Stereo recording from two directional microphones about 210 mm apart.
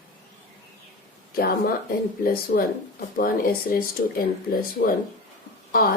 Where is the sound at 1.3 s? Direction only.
45° left (ahead or behind).